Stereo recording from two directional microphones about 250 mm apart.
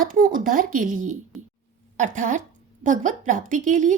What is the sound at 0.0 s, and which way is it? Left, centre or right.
Speech, right.